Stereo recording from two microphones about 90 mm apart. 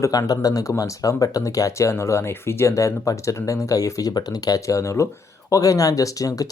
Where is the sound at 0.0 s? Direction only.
40° left (ahead or behind).